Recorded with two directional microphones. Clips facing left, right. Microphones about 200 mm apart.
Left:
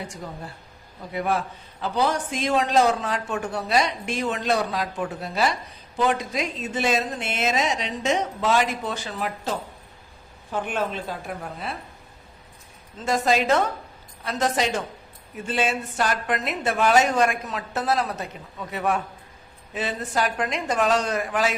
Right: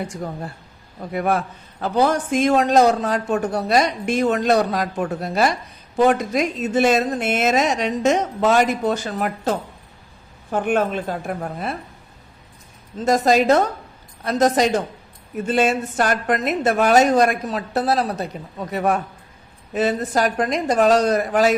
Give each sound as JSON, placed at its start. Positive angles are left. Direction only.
{"t": 1.1, "sound": "speech", "side_deg": -50}
{"t": 13.1, "sound": "a woman's voice", "side_deg": -40}